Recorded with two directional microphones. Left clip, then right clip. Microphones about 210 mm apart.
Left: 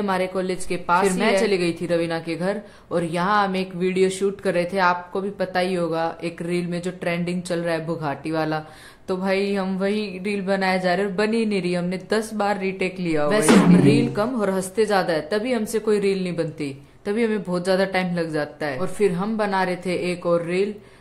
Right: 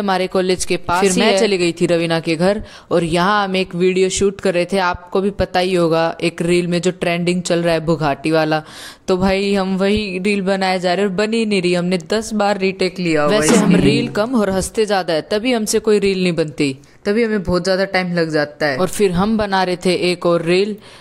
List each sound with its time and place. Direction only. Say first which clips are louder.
0.0 s speech: right 6 dB; 45° right (ahead or behind)
13.0 s speech: right 7 dB; 15° right (ahead or behind)
13.8 s speech: right 3 dB; 45° right (ahead or behind)
17.0 s speech: right 6 dB; 25° right (ahead or behind)
18.8 s speech: right 3 dB; 40° right (ahead or behind)